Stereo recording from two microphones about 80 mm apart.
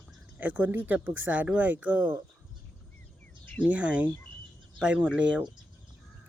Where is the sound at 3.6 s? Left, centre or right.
Centre.